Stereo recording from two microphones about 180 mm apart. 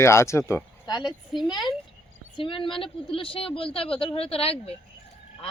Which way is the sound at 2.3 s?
30° left (ahead or behind).